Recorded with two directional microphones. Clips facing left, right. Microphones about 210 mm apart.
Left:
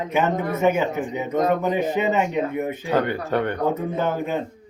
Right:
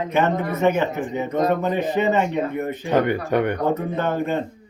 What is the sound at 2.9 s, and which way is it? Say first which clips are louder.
Speech: right 3 dB; 15° right (ahead or behind).